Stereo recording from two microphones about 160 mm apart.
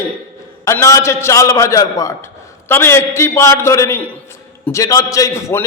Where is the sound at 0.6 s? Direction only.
20° left (ahead or behind).